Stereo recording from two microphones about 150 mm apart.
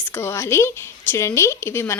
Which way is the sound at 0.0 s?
15° left (ahead or behind).